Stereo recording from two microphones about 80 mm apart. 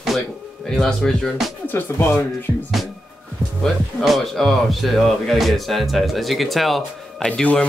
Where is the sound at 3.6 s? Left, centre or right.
Centre.